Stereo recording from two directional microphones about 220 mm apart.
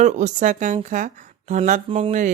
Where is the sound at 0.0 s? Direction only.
35° right (ahead or behind).